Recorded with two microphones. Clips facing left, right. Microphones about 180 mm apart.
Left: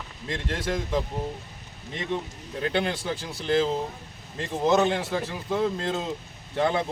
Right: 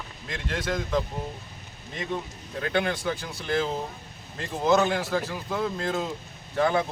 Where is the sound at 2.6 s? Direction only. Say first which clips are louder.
Even; 25° left (ahead or behind).